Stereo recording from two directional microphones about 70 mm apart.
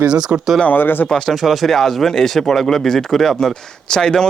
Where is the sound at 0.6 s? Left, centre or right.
Left.